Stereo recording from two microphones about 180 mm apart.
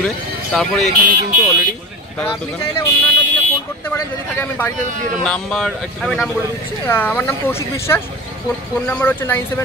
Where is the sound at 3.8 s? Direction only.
15° left (ahead or behind).